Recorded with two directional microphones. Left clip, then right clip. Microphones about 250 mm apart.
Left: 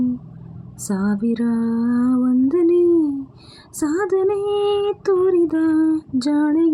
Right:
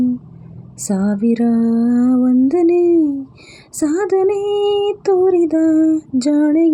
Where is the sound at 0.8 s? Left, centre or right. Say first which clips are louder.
Right 4 dB; centre.